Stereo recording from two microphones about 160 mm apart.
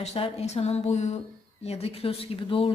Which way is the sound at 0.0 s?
40° left (ahead or behind).